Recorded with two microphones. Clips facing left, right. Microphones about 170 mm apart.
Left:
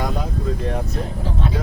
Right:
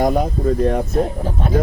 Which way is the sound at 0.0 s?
50° right (ahead or behind).